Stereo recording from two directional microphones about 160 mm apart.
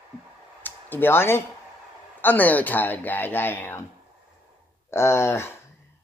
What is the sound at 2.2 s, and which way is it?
Speech, 10° left (ahead or behind).